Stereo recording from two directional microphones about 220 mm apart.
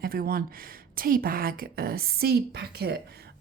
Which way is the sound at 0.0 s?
40° right (ahead or behind).